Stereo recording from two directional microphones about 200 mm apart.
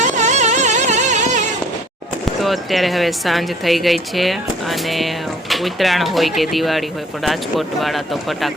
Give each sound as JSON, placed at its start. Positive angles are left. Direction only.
{"t": 0.0, "sound": "carnatic music", "side_deg": -35}
{"t": 2.4, "sound": "a woman's voice", "side_deg": 0}